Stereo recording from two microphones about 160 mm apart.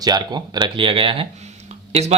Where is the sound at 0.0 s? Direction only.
25° right (ahead or behind).